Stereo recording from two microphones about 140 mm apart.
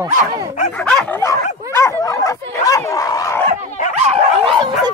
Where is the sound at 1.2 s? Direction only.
20° left (ahead or behind).